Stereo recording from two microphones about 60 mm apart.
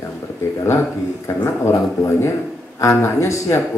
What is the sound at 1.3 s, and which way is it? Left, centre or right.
A man's voice, left.